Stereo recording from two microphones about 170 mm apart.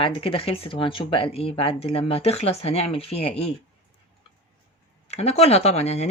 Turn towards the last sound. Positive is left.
turn(degrees=40)  # may be behind; listen again after turning